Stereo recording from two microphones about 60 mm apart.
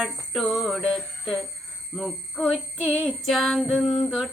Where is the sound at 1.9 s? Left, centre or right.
Centre.